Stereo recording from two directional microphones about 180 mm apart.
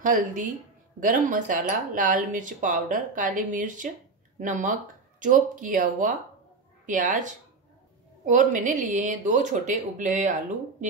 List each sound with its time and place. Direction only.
0.0 s speech: 45° right (ahead or behind)